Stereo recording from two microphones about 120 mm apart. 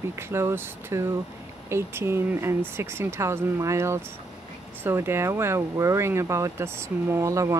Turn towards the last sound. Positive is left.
turn(degrees=-25)  # may be behind; listen again after turning